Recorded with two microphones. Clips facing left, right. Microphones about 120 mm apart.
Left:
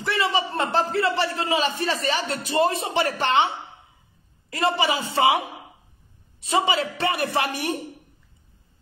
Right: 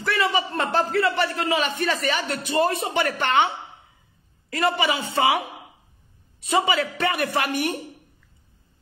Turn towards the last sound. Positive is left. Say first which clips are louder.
# right 1 dB
turn(degrees=30)  # may be behind; listen again after turning